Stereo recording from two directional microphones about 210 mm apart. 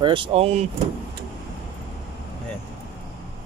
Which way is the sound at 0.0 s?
25° right (ahead or behind).